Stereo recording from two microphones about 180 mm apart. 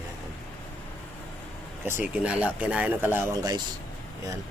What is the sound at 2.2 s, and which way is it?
Speech, 10° right (ahead or behind).